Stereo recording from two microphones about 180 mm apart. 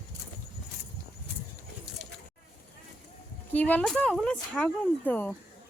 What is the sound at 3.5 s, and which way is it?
Speech, 10° left (ahead or behind).